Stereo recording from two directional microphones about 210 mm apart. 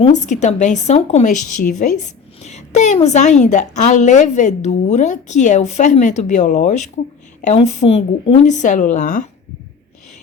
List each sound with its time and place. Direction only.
0.0 s a woman's voice: 35° left (ahead or behind)